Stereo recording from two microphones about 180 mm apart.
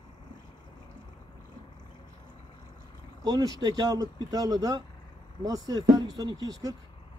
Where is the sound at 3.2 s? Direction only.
20° right (ahead or behind).